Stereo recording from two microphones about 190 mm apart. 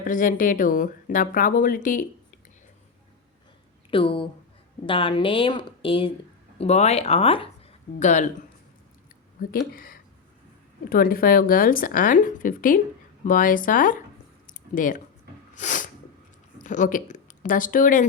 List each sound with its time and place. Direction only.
0.0 s speech: 45° left (ahead or behind)
3.9 s a woman's voice: 30° left (ahead or behind)
9.4 s speech: 50° left (ahead or behind)
14.4 s squish: 45° left (ahead or behind)
15.5 s sneeze: 40° left (ahead or behind)
16.6 s speech: 40° left (ahead or behind)